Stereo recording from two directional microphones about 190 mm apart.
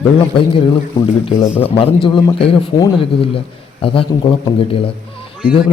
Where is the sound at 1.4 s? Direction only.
10° left (ahead or behind).